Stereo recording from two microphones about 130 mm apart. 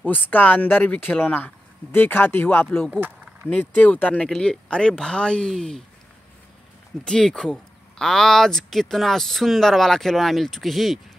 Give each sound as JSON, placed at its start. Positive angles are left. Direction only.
{"t": 0.0, "sound": "speech", "side_deg": 15}
{"t": 2.9, "sound": "a sound", "side_deg": -15}
{"t": 3.4, "sound": "speech", "side_deg": 10}
{"t": 7.1, "sound": "speech", "side_deg": 5}